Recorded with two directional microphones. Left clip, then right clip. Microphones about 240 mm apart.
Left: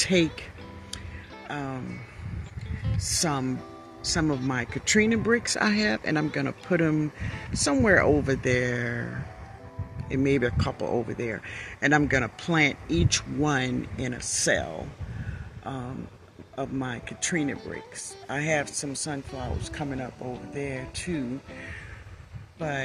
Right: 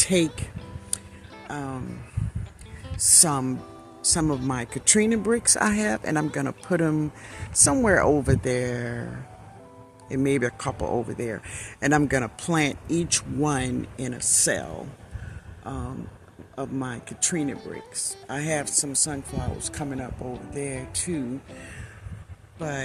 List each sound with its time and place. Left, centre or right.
0.0 s speech: centre
1.5 s speech: centre
3.0 s speech: centre